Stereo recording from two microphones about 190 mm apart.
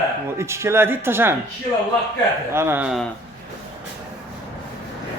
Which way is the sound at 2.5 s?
10° right (ahead or behind).